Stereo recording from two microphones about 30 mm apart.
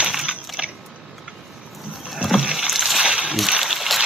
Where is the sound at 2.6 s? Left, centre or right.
Centre.